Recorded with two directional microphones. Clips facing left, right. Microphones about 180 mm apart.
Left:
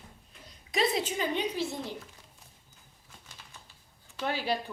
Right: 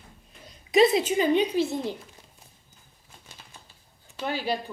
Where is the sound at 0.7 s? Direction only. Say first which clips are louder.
Right 9 dB; 20° right (ahead or behind).